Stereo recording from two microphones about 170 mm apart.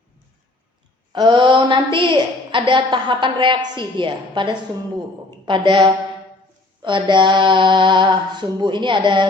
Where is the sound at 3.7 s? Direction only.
30° right (ahead or behind).